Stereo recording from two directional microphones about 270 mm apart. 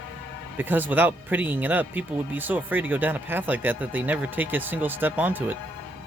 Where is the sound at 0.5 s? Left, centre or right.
Centre.